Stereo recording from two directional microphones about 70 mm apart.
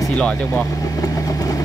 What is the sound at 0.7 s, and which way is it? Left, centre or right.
Vehicle, left.